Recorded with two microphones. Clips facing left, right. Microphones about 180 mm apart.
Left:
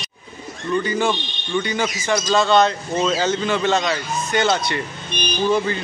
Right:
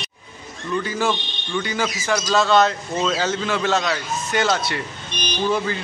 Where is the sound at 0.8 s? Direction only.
5° right (ahead or behind).